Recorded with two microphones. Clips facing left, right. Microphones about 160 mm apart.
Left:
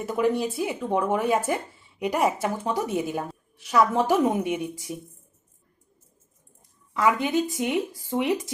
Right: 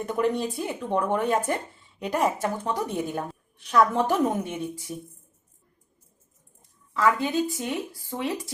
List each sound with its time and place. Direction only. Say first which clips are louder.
0.0 s a woman's voice: left 1 dB; 5° left (ahead or behind)
6.9 s a woman's voice: left 1 dB; 15° left (ahead or behind)